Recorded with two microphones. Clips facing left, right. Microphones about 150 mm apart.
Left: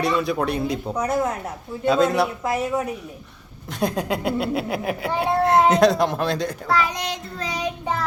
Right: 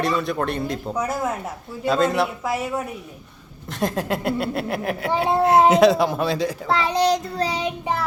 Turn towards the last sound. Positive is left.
turn(degrees=-30)  # may be behind; listen again after turning